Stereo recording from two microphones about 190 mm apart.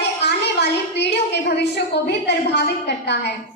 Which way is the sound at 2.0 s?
65° left (ahead or behind).